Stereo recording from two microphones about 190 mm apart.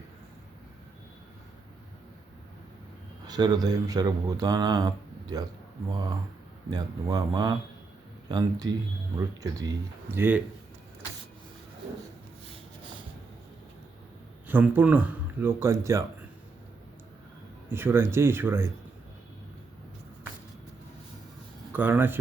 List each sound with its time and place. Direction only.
3.2 s speech: 20° right (ahead or behind)
14.4 s speech: 10° right (ahead or behind)
17.7 s speech: 10° right (ahead or behind)
21.7 s speech: 10° right (ahead or behind)